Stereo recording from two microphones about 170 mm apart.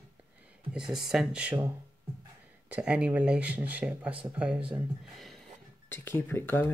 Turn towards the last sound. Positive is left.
turn(degrees=10)  # may be behind; listen again after turning